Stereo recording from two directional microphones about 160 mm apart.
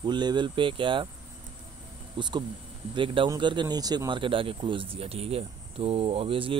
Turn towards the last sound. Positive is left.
turn(degrees=-35)  # may be behind; listen again after turning